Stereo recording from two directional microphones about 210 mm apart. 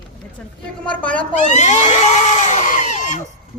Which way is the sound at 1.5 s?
35° left (ahead or behind).